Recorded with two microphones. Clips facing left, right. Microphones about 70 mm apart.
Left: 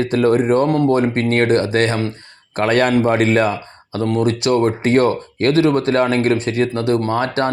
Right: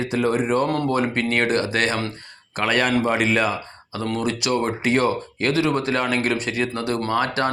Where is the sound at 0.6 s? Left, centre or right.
Left.